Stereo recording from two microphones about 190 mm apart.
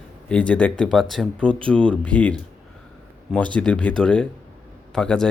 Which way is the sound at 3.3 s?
5° left (ahead or behind).